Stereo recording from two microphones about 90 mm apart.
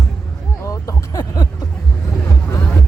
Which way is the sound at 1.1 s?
45° left (ahead or behind).